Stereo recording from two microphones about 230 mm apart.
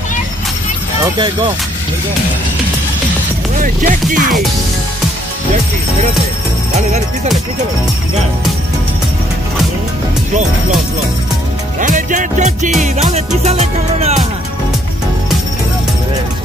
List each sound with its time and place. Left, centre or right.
1.0 s speech: centre
3.6 s music: right
11.8 s music: right